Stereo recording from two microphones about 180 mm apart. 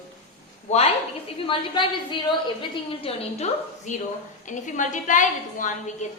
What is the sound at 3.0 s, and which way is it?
A woman's voice, 40° left (ahead or behind).